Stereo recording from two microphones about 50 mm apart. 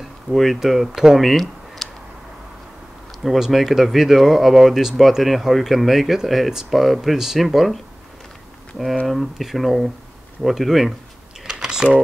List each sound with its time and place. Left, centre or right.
0.3 s speech: centre
1.3 s a sound: centre
3.3 s speech: centre
9.0 s speech: centre
11.4 s typing: centre